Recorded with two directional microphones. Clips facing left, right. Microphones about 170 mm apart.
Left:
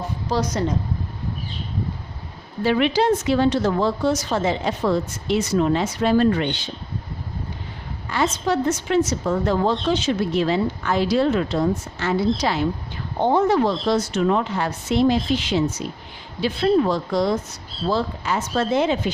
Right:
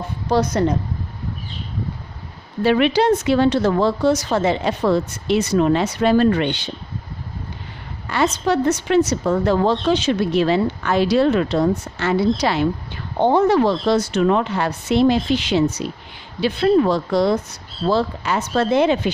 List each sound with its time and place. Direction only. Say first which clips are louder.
0.3 s speech: right 5 dB; 55° right (ahead or behind)
2.6 s a woman's voice: right 3 dB; 65° right (ahead or behind)
8.1 s a woman's voice: right 3 dB; 70° right (ahead or behind)